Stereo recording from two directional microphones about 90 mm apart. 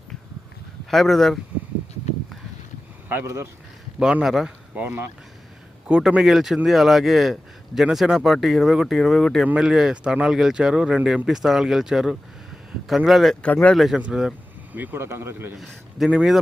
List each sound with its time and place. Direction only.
0.9 s speech: centre (ahead or behind)
3.1 s speech: 25° right (ahead or behind)
4.0 s speech: 5° right (ahead or behind)
4.7 s speech: 20° right (ahead or behind); by 9.5 s centre (ahead or behind)
9.5 s speech: 10° right (ahead or behind)
13.4 s speech: 15° left (ahead or behind)
13.7 s speech: centre (ahead or behind)
14.7 s speech: 20° right (ahead or behind)
16.0 s speech: 10° right (ahead or behind)